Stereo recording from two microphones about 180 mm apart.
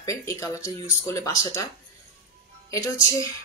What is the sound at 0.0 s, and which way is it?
Speech, 20° left (ahead or behind).